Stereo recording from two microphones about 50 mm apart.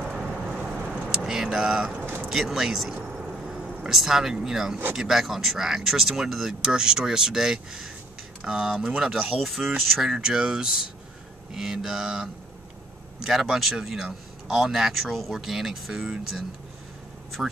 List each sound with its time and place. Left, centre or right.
0.1 s vehicle: right
0.7 s vehicle: centre
2.2 s speech: centre